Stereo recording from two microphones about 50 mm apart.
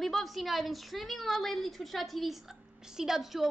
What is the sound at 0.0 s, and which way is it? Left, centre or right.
A woman's voice, centre.